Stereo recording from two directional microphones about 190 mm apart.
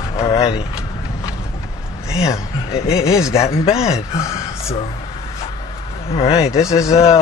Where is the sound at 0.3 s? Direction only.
30° left (ahead or behind).